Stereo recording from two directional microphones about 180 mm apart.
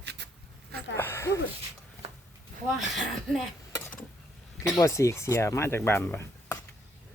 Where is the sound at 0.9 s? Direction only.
15° left (ahead or behind).